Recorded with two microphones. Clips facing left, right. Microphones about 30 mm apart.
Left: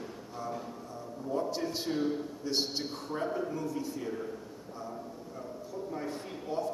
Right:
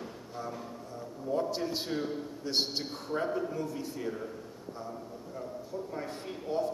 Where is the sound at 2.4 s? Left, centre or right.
Centre.